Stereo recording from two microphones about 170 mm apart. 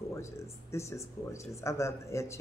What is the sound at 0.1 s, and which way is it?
Speech, 15° left (ahead or behind).